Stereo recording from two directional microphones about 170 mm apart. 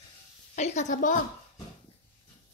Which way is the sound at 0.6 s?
40° left (ahead or behind).